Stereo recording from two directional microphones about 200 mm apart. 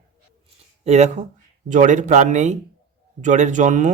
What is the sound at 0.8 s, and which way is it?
Speech, 35° right (ahead or behind).